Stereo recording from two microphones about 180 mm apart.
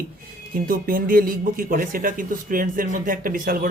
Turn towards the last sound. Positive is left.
turn(degrees=-50)  # may be behind; listen again after turning